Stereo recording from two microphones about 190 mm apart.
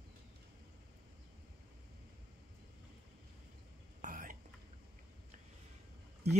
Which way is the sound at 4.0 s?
45° right (ahead or behind).